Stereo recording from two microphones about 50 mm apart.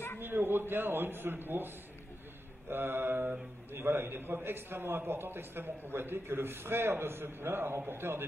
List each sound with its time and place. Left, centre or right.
0.2 s a man's voice: right
2.7 s a man's voice: right